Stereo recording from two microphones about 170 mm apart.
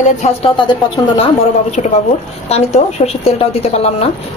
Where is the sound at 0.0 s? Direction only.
35° left (ahead or behind).